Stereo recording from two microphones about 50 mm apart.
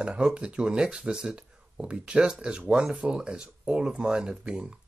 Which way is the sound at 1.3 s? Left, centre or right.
Centre.